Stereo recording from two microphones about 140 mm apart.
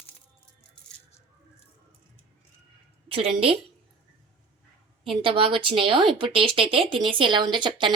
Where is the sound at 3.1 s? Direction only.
40° right (ahead or behind).